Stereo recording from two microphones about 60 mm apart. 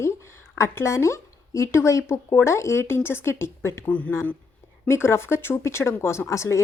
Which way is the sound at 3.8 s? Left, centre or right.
Left.